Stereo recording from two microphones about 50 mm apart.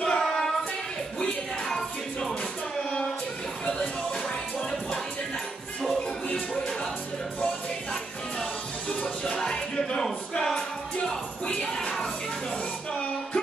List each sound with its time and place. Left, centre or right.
0.0 s child singing: centre
1.2 s music: centre
7.9 s music: centre
11.1 s a sound: centre